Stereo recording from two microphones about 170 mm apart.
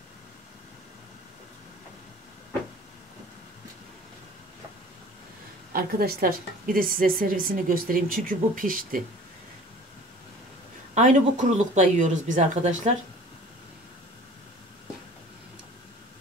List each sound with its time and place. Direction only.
5.7 s a woman's voice: 60° right (ahead or behind)
11.0 s speech: 45° right (ahead or behind)